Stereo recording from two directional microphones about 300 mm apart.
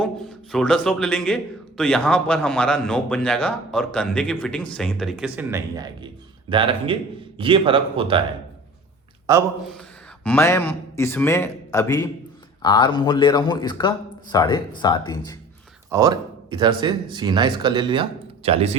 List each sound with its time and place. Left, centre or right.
0.5 s a man's voice: centre
10.2 s speech: centre
15.9 s speech: centre